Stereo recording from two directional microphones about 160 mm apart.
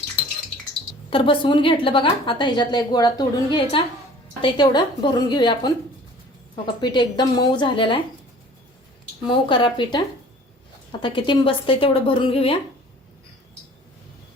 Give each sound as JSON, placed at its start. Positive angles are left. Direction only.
{"t": 1.1, "sound": "a woman's voice", "side_deg": 30}
{"t": 6.8, "sound": "a woman's voice", "side_deg": 30}
{"t": 9.2, "sound": "a woman's voice", "side_deg": 30}
{"t": 11.0, "sound": "a woman's voice", "side_deg": 30}